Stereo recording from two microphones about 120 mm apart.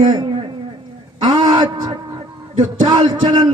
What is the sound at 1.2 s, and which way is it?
A man's voice, 35° right (ahead or behind).